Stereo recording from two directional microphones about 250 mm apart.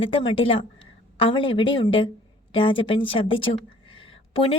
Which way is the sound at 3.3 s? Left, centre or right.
Left.